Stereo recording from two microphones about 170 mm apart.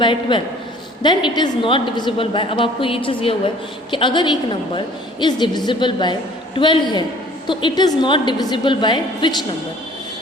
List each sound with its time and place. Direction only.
0.0 s a woman's voice: 30° left (ahead or behind)